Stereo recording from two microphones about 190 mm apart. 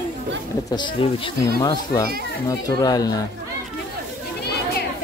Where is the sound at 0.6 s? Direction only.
25° left (ahead or behind).